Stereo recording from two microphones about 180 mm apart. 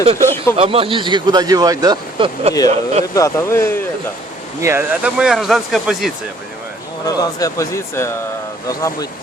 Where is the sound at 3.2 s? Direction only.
15° left (ahead or behind).